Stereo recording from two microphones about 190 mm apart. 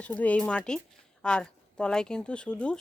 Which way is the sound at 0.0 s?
5° left (ahead or behind).